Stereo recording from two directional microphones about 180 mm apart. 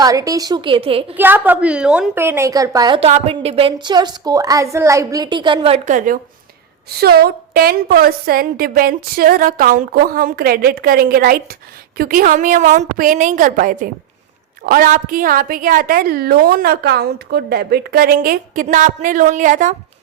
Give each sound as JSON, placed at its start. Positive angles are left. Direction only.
{"t": 0.0, "sound": "a woman's voice", "side_deg": -20}
{"t": 1.1, "sound": "a woman's voice", "side_deg": -10}
{"t": 7.0, "sound": "a woman's voice", "side_deg": -60}